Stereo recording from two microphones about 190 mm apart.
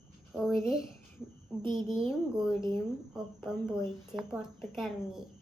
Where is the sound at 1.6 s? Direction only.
25° right (ahead or behind).